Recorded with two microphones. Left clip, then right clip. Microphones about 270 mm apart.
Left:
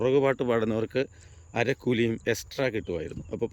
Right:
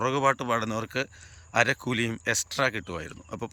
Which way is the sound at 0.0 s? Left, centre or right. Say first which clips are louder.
Left 1 dB; centre.